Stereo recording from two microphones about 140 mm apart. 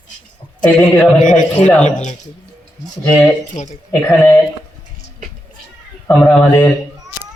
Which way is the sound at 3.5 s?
55° left (ahead or behind).